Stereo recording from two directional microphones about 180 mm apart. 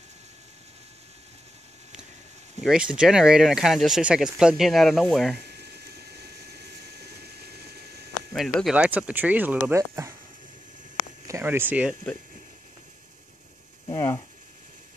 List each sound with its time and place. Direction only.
2.6 s speech: 5° right (ahead or behind)
5.4 s vehicle: 65° right (ahead or behind)
8.3 s speech: centre (ahead or behind); by 10.1 s 15° right (ahead or behind)
11.2 s speech: 15° right (ahead or behind)
13.8 s speech: 15° left (ahead or behind)